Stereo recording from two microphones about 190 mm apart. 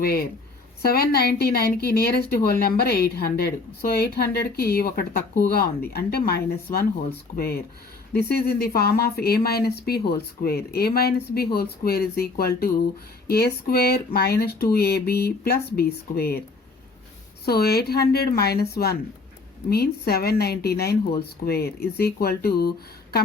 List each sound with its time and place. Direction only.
0.0 s a woman's voice: 55° left (ahead or behind)
17.4 s a woman's voice: 55° left (ahead or behind)
19.7 s a woman's voice: 55° left (ahead or behind)